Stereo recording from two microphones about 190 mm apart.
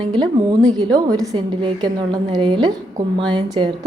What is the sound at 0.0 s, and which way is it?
A woman's voice, 25° right (ahead or behind).